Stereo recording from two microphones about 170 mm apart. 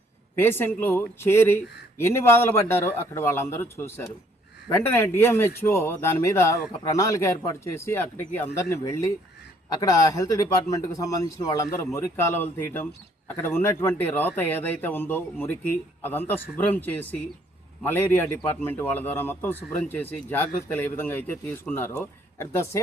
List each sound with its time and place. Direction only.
0.3 s speech: 15° left (ahead or behind)